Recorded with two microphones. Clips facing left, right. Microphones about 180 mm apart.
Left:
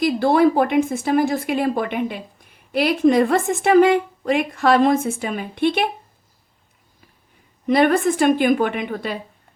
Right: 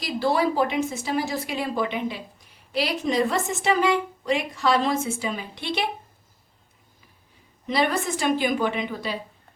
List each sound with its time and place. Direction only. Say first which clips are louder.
0.0 s speech: left 7 dB; 55° left (ahead or behind)
7.7 s speech: left 8 dB; 55° left (ahead or behind)